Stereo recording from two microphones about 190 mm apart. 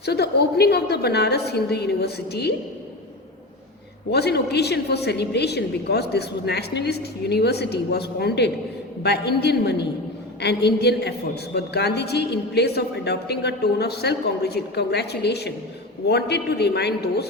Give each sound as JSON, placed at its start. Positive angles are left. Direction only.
{"t": 0.0, "sound": "a woman's voice", "side_deg": 60}
{"t": 4.1, "sound": "a woman's voice", "side_deg": 60}